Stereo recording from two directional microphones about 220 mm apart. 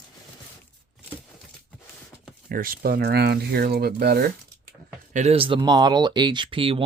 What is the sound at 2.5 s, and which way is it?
Speech, 40° right (ahead or behind).